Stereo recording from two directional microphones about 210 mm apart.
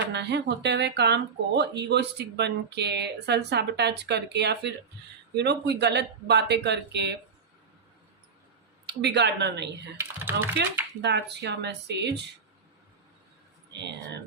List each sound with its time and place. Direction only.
0.0 s speech: 55° right (ahead or behind)
8.9 s speech: 55° right (ahead or behind)
10.0 s speech: 10° right (ahead or behind)
11.0 s speech: 55° right (ahead or behind)